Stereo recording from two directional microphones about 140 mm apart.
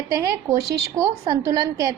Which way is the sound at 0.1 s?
25° right (ahead or behind).